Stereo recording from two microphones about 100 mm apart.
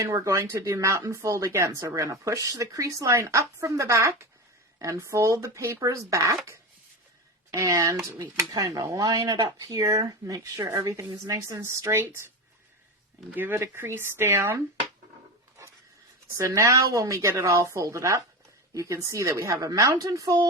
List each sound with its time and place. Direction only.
0.0 s speech: 35° right (ahead or behind)
13.3 s speech: 20° right (ahead or behind)
16.4 s speech: 30° right (ahead or behind)